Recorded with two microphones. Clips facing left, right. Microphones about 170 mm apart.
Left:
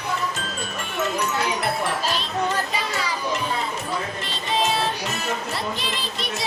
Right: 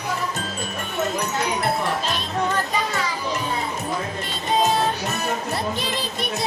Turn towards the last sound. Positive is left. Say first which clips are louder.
# right 3 dB
turn(degrees=-50)  # may be behind; listen again after turning